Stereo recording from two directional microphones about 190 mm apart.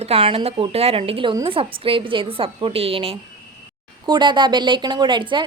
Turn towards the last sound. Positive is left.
turn(degrees=-25)  # may be behind; listen again after turning